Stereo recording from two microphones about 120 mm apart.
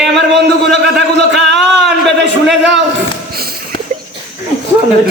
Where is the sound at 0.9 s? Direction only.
Centre (ahead or behind).